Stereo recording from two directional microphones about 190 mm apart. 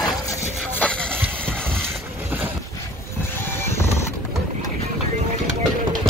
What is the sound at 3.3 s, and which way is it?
Vehicle, 15° left (ahead or behind).